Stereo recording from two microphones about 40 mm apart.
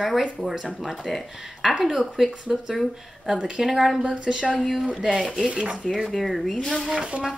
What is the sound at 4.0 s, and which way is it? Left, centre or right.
Speech, right.